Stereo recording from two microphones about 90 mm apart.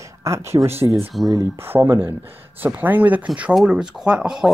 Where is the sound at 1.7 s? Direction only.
25° right (ahead or behind); by 4.4 s 5° right (ahead or behind).